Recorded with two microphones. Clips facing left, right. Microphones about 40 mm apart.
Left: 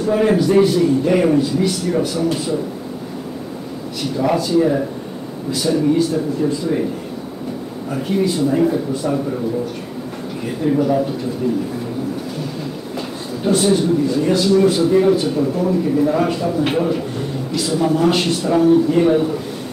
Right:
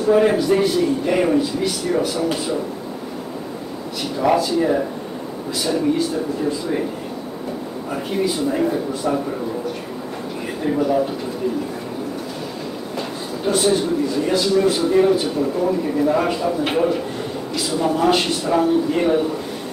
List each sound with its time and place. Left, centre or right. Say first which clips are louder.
0.0 s a man's voice: even; centre
4.0 s speech: even; centre
7.9 s a man's voice: left 3 dB; centre
10.6 s speech: left 3 dB; centre
12.9 s a man's voice: left 1 dB; centre